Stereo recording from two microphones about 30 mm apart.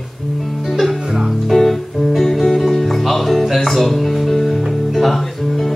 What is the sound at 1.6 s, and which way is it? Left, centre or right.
Guitar, centre.